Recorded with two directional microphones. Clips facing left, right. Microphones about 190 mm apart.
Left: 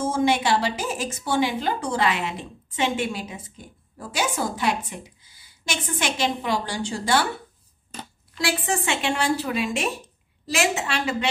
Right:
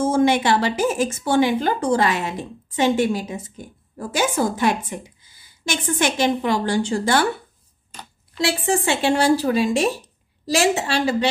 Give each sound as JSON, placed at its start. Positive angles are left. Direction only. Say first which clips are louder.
{"t": 0.2, "sound": "a woman's voice", "louder": "right 1 dB", "side_deg": -55}
{"t": 8.4, "sound": "speech", "louder": "right 4 dB", "side_deg": -30}